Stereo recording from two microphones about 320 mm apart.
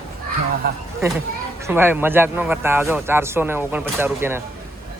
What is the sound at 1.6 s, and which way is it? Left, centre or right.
A man's voice, centre.